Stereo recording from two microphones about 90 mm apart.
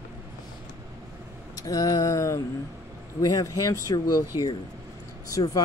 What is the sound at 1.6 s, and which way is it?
Speech, 40° left (ahead or behind).